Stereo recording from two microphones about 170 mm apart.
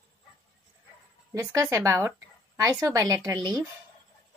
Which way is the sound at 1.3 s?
20° right (ahead or behind).